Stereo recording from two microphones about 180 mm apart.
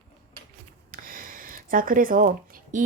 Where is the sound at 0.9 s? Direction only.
50° right (ahead or behind).